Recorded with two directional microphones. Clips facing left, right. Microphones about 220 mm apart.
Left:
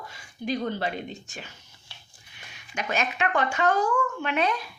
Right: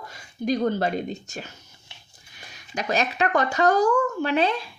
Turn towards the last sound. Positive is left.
turn(degrees=-30)  # may be behind; listen again after turning